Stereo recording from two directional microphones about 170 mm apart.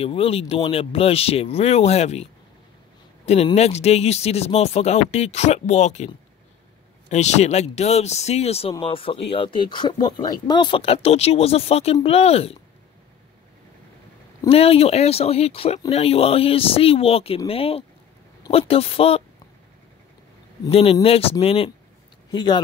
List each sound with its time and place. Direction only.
0.0 s speech: 35° left (ahead or behind)
3.5 s speech: 40° left (ahead or behind)
14.5 s speech: 35° left (ahead or behind)
20.7 s speech: 35° left (ahead or behind)